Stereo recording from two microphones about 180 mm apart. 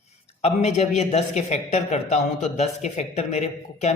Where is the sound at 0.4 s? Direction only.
40° left (ahead or behind).